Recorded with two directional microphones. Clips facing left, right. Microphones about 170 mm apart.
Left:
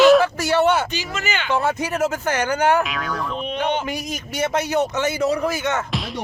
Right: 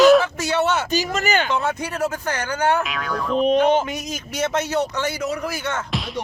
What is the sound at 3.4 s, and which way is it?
Speech, 40° right (ahead or behind).